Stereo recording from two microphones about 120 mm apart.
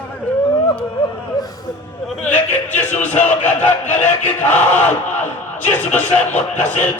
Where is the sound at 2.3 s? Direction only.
15° left (ahead or behind).